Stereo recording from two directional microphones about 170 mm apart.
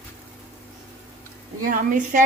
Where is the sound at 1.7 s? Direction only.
50° right (ahead or behind).